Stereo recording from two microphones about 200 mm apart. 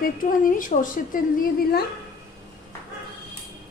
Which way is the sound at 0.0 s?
45° left (ahead or behind).